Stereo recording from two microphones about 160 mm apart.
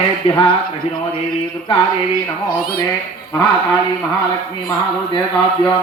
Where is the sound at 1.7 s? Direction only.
35° left (ahead or behind).